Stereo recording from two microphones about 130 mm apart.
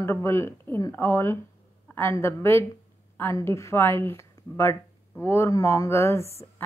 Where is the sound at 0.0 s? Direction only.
20° left (ahead or behind).